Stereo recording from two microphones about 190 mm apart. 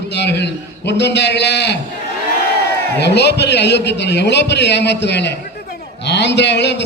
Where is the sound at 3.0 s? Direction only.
65° left (ahead or behind).